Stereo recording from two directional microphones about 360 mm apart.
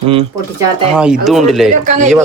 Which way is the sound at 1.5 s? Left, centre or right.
Centre.